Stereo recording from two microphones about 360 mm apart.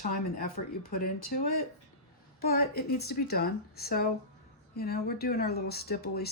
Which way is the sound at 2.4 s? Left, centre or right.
Left.